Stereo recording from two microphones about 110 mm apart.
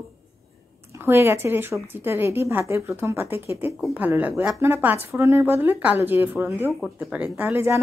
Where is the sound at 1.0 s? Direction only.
20° right (ahead or behind).